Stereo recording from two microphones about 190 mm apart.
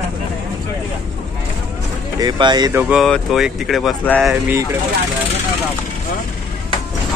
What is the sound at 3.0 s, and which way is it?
Speech, centre (ahead or behind).